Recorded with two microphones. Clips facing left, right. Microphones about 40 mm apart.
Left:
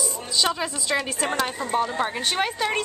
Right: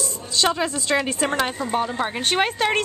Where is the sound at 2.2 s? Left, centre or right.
Right.